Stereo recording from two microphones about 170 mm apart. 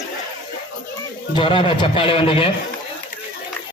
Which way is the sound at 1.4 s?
30° left (ahead or behind).